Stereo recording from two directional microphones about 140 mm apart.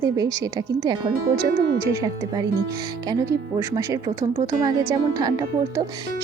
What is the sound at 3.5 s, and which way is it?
Speech, 25° right (ahead or behind).